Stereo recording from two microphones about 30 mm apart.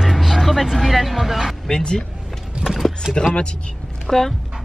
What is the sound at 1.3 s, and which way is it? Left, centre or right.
Speech, centre.